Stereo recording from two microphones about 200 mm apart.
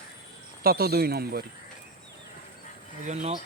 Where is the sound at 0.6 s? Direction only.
50° right (ahead or behind).